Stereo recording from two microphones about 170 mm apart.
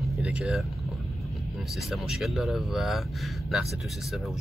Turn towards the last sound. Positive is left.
turn(degrees=0)  # may be behind; listen again after turning